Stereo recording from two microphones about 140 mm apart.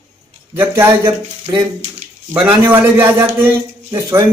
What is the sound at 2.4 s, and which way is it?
A man's voice, 10° right (ahead or behind).